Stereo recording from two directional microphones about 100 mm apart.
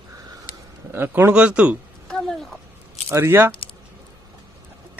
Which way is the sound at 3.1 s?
25° right (ahead or behind).